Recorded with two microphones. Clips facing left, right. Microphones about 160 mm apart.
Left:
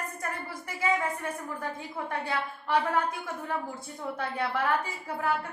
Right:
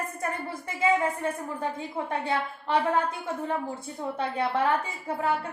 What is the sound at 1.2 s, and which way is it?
A woman's voice, 25° right (ahead or behind).